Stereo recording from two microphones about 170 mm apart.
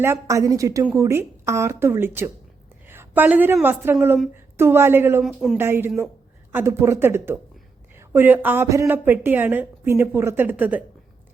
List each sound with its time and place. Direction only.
0.0 s a woman's voice: 15° right (ahead or behind)
5.2 s speech: centre (ahead or behind)
5.5 s a woman's voice: 15° right (ahead or behind)